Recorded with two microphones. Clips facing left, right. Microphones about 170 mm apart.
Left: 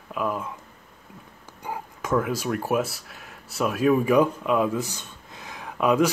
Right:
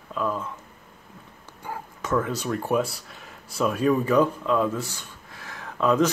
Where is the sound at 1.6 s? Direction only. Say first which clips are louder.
Left 1 dB; 15° left (ahead or behind).